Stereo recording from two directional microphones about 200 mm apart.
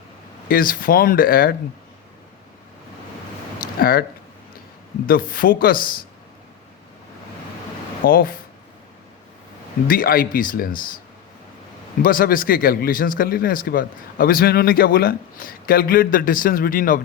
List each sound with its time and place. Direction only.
0.4 s speech: 45° left (ahead or behind)
3.6 s a sound: 45° left (ahead or behind)
5.0 s speech: 45° left (ahead or behind)
8.0 s speech: 45° left (ahead or behind)
9.8 s speech: 45° left (ahead or behind)
12.0 s speech: 45° left (ahead or behind)